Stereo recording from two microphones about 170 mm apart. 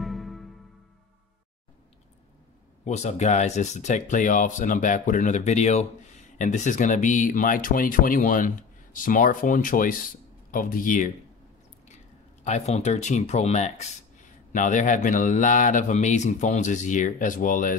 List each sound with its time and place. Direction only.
0.0 s music: centre (ahead or behind)
2.8 s speech: 40° left (ahead or behind)
12.4 s speech: 40° left (ahead or behind)